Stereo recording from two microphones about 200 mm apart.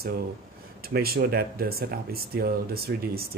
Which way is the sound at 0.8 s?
50° right (ahead or behind).